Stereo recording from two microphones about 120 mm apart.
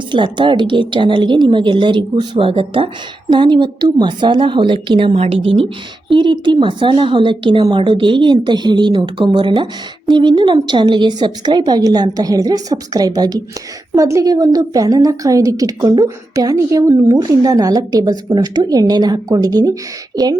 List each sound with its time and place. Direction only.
0.1 s a woman's voice: 40° right (ahead or behind)